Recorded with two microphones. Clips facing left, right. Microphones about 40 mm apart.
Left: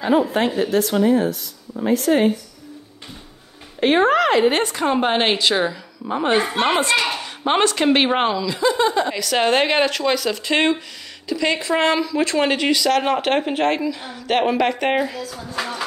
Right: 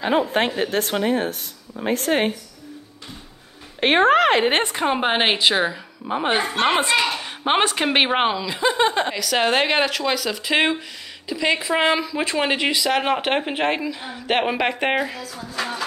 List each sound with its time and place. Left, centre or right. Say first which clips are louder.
0.6 s speech: left 4 dB; right
3.8 s a woman's voice: even; right
4.8 s speech: left 2 dB; centre
6.5 s speech: left 1 dB; centre
6.8 s speech: left 1 dB; centre; by 9.1 s right
9.1 s speech: left 2 dB; centre